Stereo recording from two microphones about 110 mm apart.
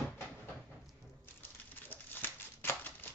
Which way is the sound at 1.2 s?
15° left (ahead or behind).